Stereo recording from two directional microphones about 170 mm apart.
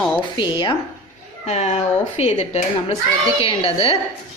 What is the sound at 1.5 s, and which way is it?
A woman's voice, 40° left (ahead or behind).